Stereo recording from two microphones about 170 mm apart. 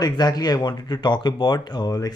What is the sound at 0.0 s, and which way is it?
Speech, 25° left (ahead or behind).